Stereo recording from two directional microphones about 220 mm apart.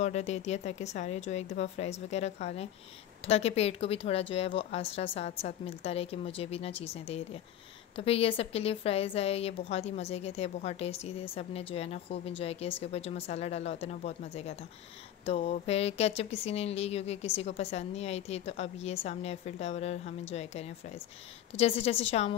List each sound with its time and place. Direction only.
0.0 s speech: 30° left (ahead or behind)